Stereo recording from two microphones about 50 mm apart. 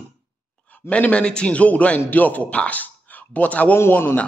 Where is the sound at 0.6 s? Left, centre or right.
Left.